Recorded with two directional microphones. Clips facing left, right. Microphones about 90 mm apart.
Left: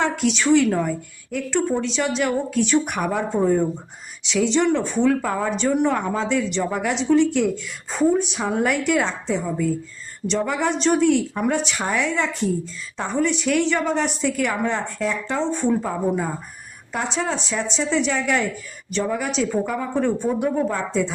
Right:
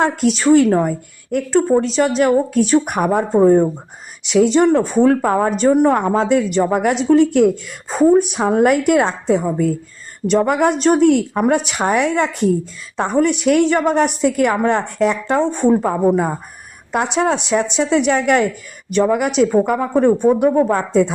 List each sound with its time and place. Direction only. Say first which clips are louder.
0.0 s a woman's voice: right 5 dB; 45° right (ahead or behind)